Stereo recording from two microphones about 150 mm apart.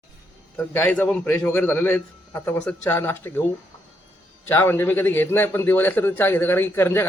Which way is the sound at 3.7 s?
20° left (ahead or behind).